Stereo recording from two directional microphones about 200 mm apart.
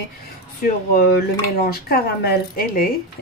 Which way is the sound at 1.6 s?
50° left (ahead or behind).